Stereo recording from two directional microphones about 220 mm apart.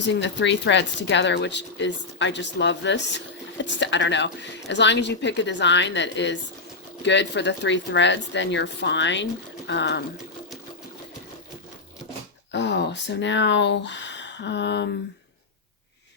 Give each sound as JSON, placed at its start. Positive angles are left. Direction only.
{"t": 0.1, "sound": "speech", "side_deg": 55}
{"t": 12.5, "sound": "speech", "side_deg": 55}